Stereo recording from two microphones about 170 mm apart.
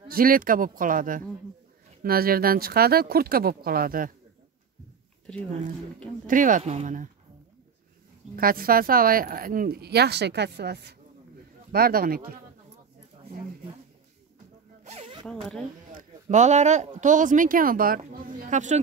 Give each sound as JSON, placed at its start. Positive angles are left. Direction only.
{"t": 0.1, "sound": "speech", "side_deg": -55}
{"t": 5.3, "sound": "speech", "side_deg": 5}
{"t": 6.2, "sound": "speech", "side_deg": -50}
{"t": 8.4, "sound": "speech", "side_deg": -60}
{"t": 11.7, "sound": "speech", "side_deg": -60}
{"t": 14.9, "sound": "zipper", "side_deg": -35}
{"t": 15.2, "sound": "speech", "side_deg": 5}
{"t": 15.9, "sound": "speech", "side_deg": -50}